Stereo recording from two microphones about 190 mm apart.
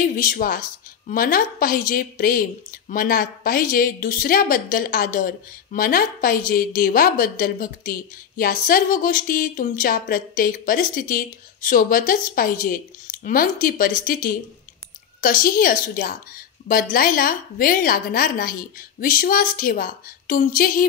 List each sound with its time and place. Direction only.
0.0 s a woman's voice: 45° left (ahead or behind)